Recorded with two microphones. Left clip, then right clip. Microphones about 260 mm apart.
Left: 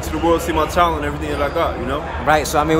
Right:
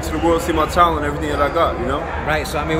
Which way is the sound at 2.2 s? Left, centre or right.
Centre.